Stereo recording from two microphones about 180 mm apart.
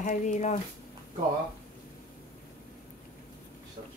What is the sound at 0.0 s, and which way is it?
Speech, 45° left (ahead or behind).